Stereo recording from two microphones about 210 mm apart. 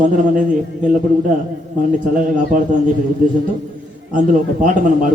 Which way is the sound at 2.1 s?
40° right (ahead or behind).